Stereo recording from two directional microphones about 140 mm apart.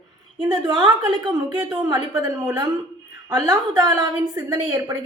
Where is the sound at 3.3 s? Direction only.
30° right (ahead or behind).